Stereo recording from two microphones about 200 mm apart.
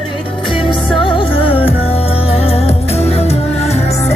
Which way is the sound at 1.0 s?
25° left (ahead or behind).